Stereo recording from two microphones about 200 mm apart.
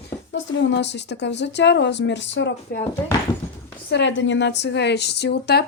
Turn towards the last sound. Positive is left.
turn(degrees=55)  # may be behind; listen again after turning